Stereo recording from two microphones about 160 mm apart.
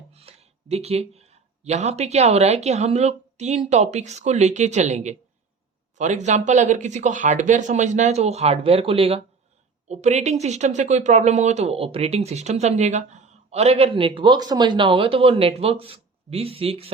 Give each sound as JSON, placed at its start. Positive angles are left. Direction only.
{"t": 0.1, "sound": "speech", "side_deg": -40}